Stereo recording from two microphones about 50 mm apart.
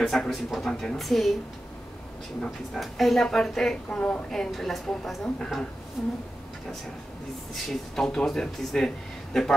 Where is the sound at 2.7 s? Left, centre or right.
Centre.